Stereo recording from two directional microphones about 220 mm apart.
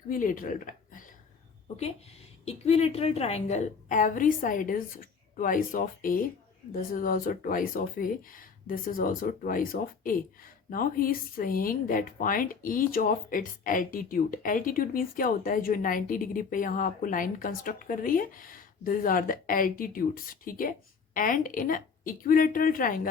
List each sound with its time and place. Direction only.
0.1 s speech: 40° left (ahead or behind)
2.4 s speech: 30° left (ahead or behind)